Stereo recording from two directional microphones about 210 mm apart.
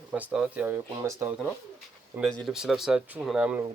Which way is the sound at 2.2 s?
Centre (ahead or behind).